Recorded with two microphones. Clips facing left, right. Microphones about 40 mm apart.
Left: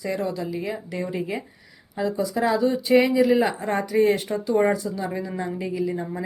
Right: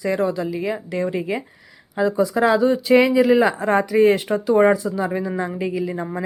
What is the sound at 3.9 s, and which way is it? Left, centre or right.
Speech, right.